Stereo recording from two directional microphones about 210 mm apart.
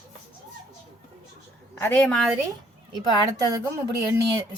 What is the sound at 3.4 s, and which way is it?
Speech, 15° right (ahead or behind).